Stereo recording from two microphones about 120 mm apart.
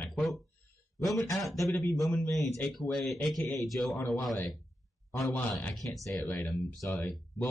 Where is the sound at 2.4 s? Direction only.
25° left (ahead or behind).